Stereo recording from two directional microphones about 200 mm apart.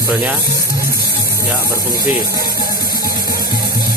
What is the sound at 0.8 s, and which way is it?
Music, 45° left (ahead or behind).